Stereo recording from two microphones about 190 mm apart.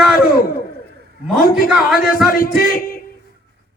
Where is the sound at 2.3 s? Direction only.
50° left (ahead or behind).